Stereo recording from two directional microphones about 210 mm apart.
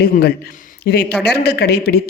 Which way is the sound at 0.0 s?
50° left (ahead or behind).